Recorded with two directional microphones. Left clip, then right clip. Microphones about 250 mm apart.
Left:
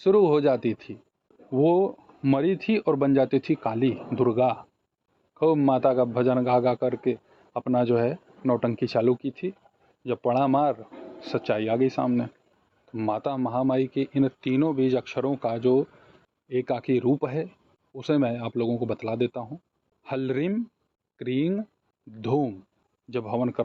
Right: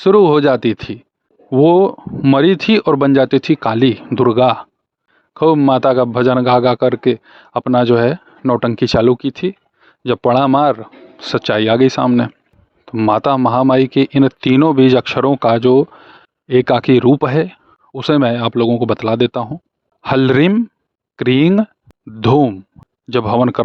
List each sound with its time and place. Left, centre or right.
0.0 s a man's voice: right